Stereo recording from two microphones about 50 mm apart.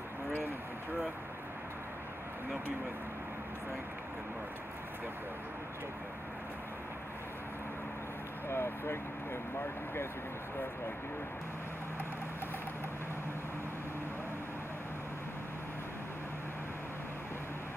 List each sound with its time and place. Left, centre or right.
8.5 s speech: left